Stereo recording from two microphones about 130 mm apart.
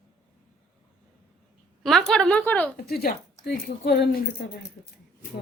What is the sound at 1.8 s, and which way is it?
Speech, 5° left (ahead or behind).